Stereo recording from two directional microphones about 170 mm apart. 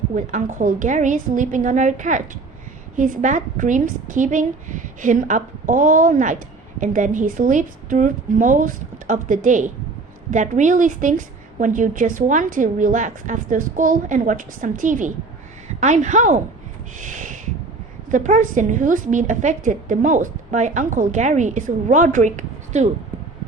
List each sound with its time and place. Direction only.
0.1 s a woman's voice: 45° right (ahead or behind)
17.0 s a sound: 45° right (ahead or behind)
18.1 s a woman's voice: 50° right (ahead or behind)